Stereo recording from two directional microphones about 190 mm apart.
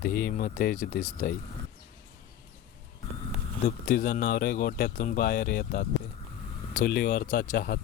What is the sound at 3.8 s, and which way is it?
Speech, 50° left (ahead or behind).